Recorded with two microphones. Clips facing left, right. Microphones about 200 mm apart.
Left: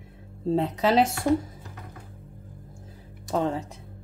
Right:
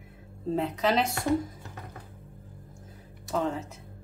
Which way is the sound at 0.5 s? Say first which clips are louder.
Left 4 dB; 30° left (ahead or behind).